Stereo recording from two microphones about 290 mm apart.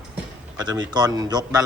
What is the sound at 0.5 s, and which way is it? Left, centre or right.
Speech, centre.